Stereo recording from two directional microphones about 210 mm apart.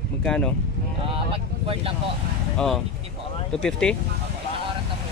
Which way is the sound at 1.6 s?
25° right (ahead or behind).